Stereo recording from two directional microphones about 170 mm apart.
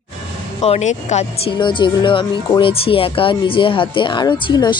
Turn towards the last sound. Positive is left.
turn(degrees=25)  # may be behind; listen again after turning